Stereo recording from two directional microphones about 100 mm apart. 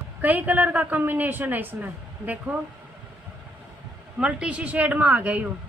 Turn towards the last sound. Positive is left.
turn(degrees=-15)  # may be behind; listen again after turning